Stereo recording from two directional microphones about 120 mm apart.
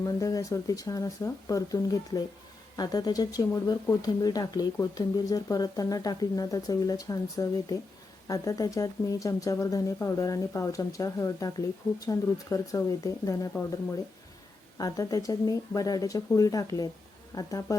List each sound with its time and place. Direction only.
0.0 s speech: 30° left (ahead or behind)
14.8 s speech: 30° left (ahead or behind)